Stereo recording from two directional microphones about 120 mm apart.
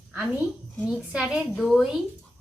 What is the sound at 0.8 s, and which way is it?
A woman's voice, 5° right (ahead or behind).